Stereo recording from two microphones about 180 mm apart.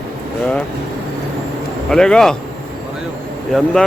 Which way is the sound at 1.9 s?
5° left (ahead or behind).